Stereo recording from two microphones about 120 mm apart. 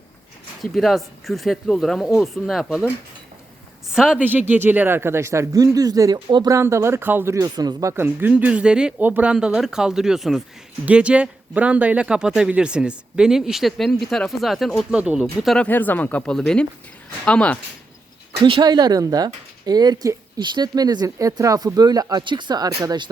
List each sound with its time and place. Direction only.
0.6 s speech: centre (ahead or behind)
3.9 s a man's voice: 5° right (ahead or behind); by 6.1 s 30° right (ahead or behind)
6.1 s speech: 40° right (ahead or behind)
6.5 s a man's voice: 20° right (ahead or behind)
7.3 s speech: 30° right (ahead or behind); by 15.4 s 10° right (ahead or behind)
15.4 s speech: 10° left (ahead or behind)
18.4 s speech: 40° right (ahead or behind)